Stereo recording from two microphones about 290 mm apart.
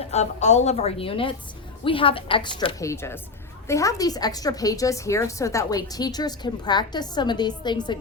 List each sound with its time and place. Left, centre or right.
0.0 s a woman's voice: left